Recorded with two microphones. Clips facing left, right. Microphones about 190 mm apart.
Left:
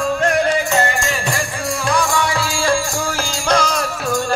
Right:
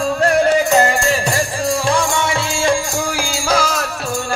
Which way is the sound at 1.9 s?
25° right (ahead or behind).